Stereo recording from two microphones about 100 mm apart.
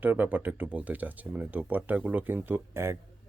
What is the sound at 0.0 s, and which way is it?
Speech, 20° right (ahead or behind).